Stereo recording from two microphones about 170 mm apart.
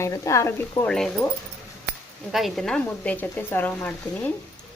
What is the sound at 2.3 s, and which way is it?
Speech, centre (ahead or behind).